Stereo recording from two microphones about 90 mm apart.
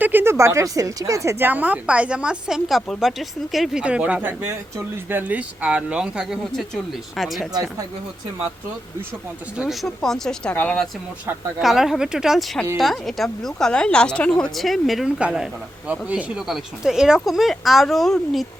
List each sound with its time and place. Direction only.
0.0 s speech: 25° right (ahead or behind)
1.5 s a woman's voice: 15° right (ahead or behind); by 7.4 s centre (ahead or behind)
9.6 s a woman's voice: 5° left (ahead or behind)
10.5 s speech: 20° left (ahead or behind)
11.6 s a woman's voice: 5° right (ahead or behind)
16.5 s a woman's voice: 5° right (ahead or behind)